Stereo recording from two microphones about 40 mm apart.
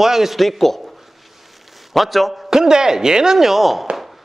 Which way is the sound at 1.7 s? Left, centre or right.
Centre.